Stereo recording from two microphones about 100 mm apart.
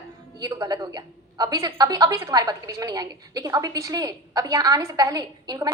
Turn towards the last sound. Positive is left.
turn(degrees=-35)  # may be behind; listen again after turning